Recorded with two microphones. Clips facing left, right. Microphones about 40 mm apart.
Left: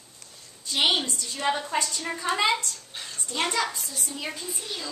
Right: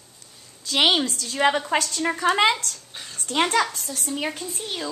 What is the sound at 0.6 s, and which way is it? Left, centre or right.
A woman's voice, right.